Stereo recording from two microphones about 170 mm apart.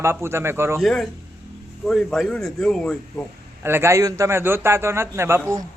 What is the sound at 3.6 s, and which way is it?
Speech, 15° right (ahead or behind).